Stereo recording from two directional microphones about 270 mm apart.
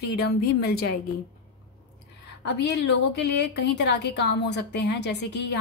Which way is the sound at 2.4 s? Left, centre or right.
Left.